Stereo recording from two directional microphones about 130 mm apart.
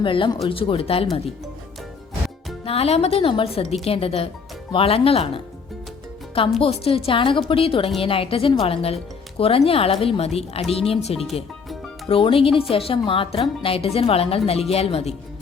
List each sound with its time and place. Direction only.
0.0 s speech: 40° left (ahead or behind)
2.6 s speech: 50° left (ahead or behind)